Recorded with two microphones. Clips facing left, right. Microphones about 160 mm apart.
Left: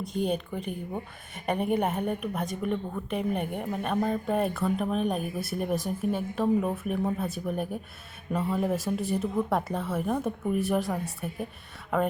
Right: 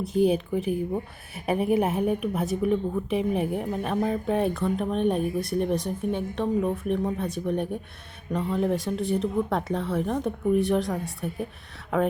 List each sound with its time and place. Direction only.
0.0 s a woman's voice: 5° right (ahead or behind)